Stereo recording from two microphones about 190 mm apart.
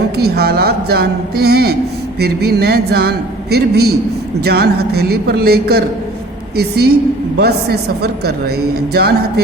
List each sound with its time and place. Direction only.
0.2 s a man's voice: 55° right (ahead or behind)